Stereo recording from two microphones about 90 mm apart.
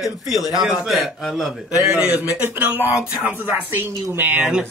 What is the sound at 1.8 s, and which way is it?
Speech, 15° right (ahead or behind).